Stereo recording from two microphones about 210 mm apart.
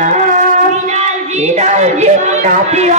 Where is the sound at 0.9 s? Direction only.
35° right (ahead or behind).